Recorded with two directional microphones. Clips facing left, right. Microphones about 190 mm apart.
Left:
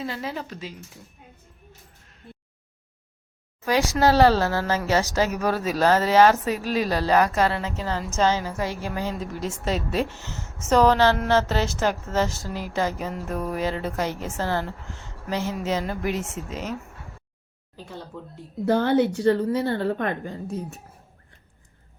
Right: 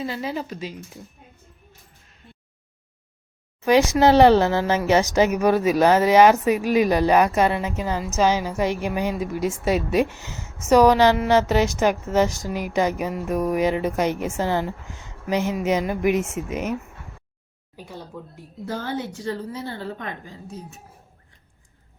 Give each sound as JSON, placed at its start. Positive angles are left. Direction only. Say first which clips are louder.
{"t": 0.0, "sound": "speech", "louder": "right 3 dB", "side_deg": 0}
{"t": 0.4, "sound": "speech", "louder": "right 4 dB", "side_deg": -15}
{"t": 3.6, "sound": "speech", "louder": "right 5 dB", "side_deg": -20}
{"t": 17.7, "sound": "speech", "louder": "right 1 dB", "side_deg": -10}
{"t": 18.6, "sound": "a woman's voice", "louder": "left 9 dB", "side_deg": 65}